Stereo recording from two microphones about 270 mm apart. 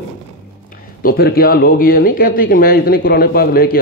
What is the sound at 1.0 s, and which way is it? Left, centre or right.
Speech, left.